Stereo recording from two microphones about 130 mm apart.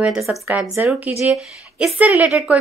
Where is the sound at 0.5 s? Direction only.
15° right (ahead or behind).